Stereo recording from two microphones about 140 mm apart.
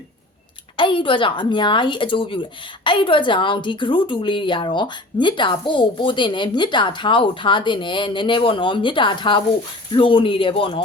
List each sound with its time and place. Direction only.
0.8 s speech: 35° left (ahead or behind)